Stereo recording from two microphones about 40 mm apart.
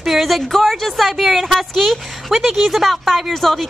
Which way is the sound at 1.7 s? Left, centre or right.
Centre.